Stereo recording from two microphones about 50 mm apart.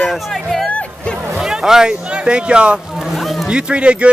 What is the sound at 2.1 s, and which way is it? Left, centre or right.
Speech, centre.